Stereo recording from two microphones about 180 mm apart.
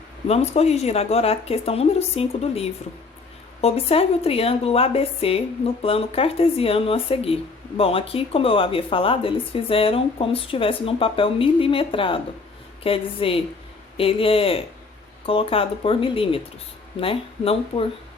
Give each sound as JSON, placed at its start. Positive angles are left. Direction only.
{"t": 0.3, "sound": "speech", "side_deg": 35}